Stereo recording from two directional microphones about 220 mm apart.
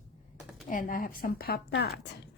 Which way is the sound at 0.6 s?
40° left (ahead or behind).